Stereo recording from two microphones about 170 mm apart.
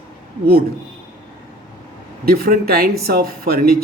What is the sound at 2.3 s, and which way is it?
Speech, 65° right (ahead or behind).